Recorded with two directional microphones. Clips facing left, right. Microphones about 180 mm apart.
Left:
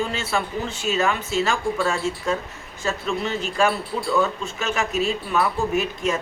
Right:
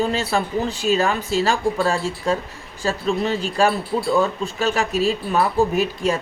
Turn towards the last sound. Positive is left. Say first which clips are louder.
# right 2 dB
turn(degrees=-35)  # may be behind; listen again after turning